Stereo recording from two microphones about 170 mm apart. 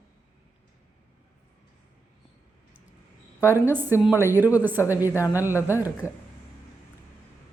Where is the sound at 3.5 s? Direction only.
10° right (ahead or behind).